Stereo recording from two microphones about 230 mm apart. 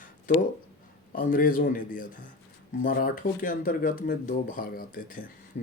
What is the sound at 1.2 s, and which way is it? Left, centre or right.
Speech, left.